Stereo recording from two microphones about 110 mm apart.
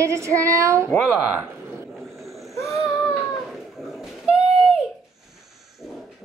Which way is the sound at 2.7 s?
Centre (ahead or behind).